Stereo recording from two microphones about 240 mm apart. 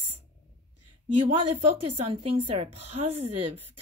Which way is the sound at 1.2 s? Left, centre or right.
Right.